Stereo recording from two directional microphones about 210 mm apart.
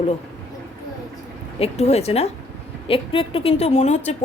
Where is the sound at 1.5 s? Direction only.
30° left (ahead or behind).